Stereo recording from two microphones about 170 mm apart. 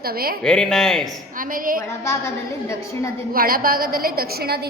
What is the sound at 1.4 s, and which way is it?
Speech, 55° right (ahead or behind).